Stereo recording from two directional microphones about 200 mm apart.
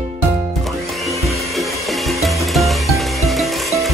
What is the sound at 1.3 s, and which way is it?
Music, centre (ahead or behind).